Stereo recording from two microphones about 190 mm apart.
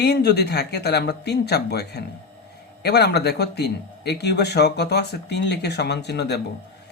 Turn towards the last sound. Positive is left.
turn(degrees=60)  # may be behind; listen again after turning